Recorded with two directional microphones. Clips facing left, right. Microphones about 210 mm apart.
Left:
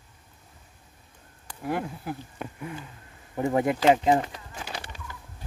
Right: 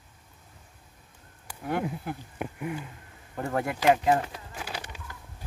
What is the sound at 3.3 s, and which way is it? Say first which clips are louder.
Speech: left 6 dB; 15° left (ahead or behind).